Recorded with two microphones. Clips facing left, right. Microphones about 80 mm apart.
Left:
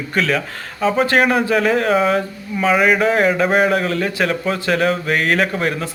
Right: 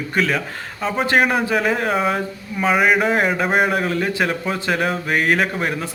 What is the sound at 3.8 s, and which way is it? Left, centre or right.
A man's voice, centre.